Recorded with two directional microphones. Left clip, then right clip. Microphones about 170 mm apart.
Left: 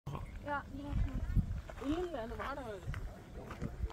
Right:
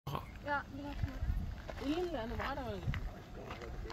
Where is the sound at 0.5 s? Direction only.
40° right (ahead or behind).